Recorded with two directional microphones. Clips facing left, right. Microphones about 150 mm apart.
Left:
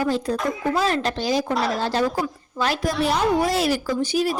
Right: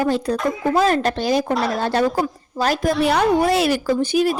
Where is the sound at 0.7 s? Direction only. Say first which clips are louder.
Right 7 dB; 50° right (ahead or behind).